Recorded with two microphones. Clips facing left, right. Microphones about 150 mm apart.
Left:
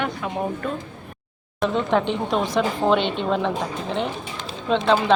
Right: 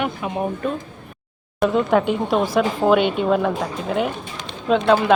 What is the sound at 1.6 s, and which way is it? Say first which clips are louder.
Speech: right 3 dB; 5° right (ahead or behind).